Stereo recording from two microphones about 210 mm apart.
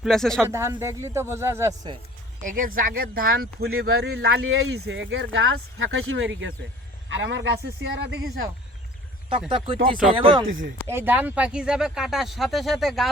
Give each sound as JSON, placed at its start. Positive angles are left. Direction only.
{"t": 0.0, "sound": "speech", "side_deg": 0}
{"t": 0.4, "sound": "speech", "side_deg": -10}
{"t": 2.4, "sound": "speech", "side_deg": -40}
{"t": 4.4, "sound": "speech", "side_deg": -65}
{"t": 9.5, "sound": "speech", "side_deg": -25}
{"t": 10.8, "sound": "speech", "side_deg": -10}